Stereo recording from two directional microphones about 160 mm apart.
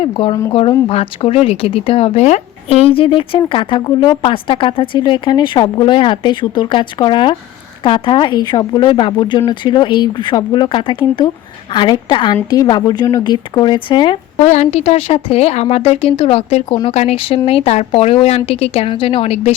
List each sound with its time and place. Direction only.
0.0 s speech: 35° left (ahead or behind)
14.4 s speech: 45° left (ahead or behind)